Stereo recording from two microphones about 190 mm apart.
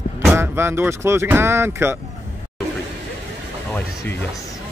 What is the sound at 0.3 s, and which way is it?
Speech, 15° right (ahead or behind).